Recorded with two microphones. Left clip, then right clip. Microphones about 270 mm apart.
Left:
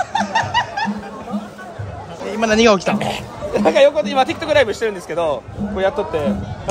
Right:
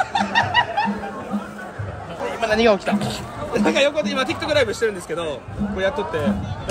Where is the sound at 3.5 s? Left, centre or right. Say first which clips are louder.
Left 6 dB; centre.